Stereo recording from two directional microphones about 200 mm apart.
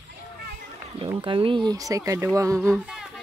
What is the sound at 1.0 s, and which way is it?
Speech, 25° right (ahead or behind).